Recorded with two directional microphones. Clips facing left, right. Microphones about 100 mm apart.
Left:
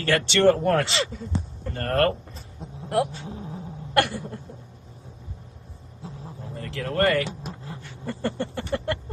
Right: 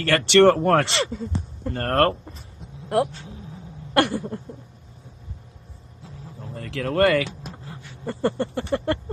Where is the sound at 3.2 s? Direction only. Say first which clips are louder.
Left 4 dB; 40° left (ahead or behind).